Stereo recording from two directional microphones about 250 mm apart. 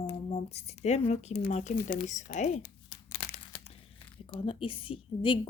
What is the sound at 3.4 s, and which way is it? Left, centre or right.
Crumpling, left.